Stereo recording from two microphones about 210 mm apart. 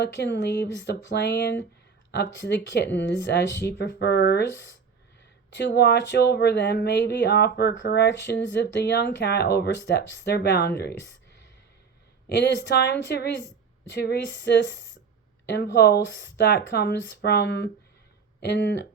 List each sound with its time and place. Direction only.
0.0 s speech: 55° left (ahead or behind)
5.6 s speech: 55° left (ahead or behind)
12.3 s speech: 55° left (ahead or behind)